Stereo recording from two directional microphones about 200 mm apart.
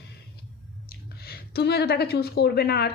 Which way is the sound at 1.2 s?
50° left (ahead or behind).